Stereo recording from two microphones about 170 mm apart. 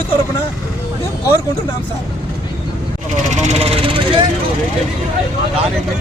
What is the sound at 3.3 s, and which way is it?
Speech, 40° right (ahead or behind).